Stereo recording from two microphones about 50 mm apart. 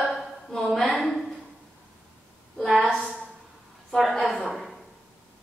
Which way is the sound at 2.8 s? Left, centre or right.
Centre.